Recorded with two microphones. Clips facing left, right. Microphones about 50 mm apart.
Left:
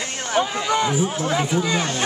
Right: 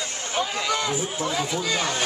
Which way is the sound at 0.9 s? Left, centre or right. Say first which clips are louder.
Left 5 dB; left.